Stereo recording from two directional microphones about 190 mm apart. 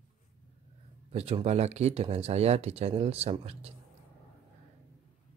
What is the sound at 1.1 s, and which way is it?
Speech, 30° right (ahead or behind).